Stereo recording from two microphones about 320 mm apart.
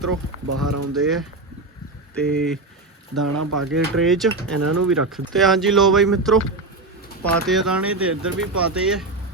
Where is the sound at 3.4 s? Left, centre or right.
Right.